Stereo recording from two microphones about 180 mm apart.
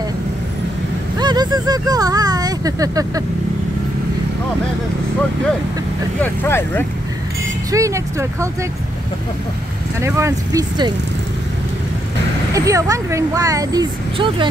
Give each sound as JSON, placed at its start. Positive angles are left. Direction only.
{"t": 1.1, "sound": "speech", "side_deg": -25}
{"t": 6.2, "sound": "speech", "side_deg": 10}
{"t": 7.7, "sound": "speech", "side_deg": -15}
{"t": 9.9, "sound": "speech", "side_deg": -15}
{"t": 12.5, "sound": "speech", "side_deg": -20}